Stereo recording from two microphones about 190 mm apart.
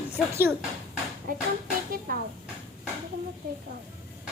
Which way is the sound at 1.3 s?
50° right (ahead or behind).